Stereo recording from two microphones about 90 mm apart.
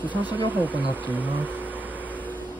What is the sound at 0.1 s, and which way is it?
Speech, 20° right (ahead or behind).